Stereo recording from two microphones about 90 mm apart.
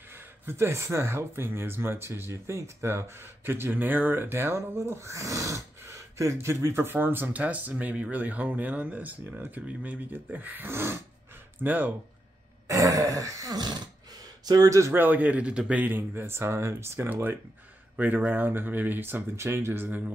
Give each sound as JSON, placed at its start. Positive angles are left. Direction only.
{"t": 0.5, "sound": "speech", "side_deg": -30}
{"t": 12.6, "sound": "a sound", "side_deg": -40}
{"t": 15.0, "sound": "speech", "side_deg": -20}